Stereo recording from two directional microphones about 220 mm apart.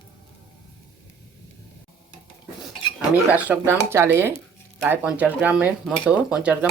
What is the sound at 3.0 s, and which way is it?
Speech, 5° right (ahead or behind).